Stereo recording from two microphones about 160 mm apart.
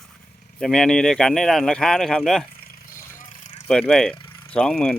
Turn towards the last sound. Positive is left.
turn(degrees=5)  # may be behind; listen again after turning